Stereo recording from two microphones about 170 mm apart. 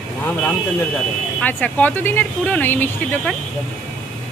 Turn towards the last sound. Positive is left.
turn(degrees=10)  # may be behind; listen again after turning